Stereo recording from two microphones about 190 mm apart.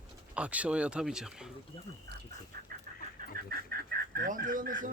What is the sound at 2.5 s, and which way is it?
Chicken, 55° right (ahead or behind).